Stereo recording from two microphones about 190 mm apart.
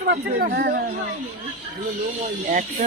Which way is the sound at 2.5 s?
40° right (ahead or behind).